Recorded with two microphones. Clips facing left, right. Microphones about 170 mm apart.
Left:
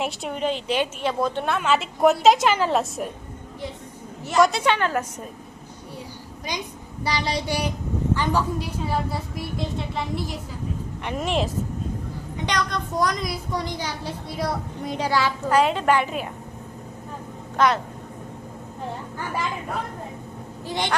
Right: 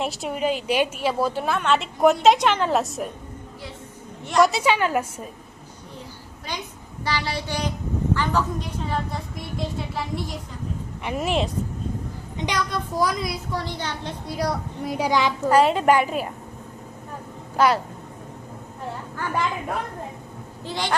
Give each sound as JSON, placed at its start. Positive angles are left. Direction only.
{"t": 0.0, "sound": "a woman's voice", "side_deg": 0}
{"t": 4.3, "sound": "a woman's voice", "side_deg": 0}
{"t": 6.5, "sound": "a woman's voice", "side_deg": 15}
{"t": 13.6, "sound": "a woman's voice", "side_deg": 15}
{"t": 14.9, "sound": "a woman's voice", "side_deg": -15}
{"t": 17.6, "sound": "a woman's voice", "side_deg": -10}
{"t": 20.7, "sound": "a woman's voice", "side_deg": 20}